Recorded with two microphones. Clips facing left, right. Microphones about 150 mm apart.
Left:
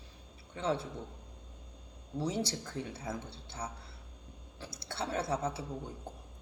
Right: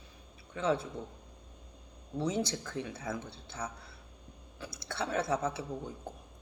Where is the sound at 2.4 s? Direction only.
30° left (ahead or behind).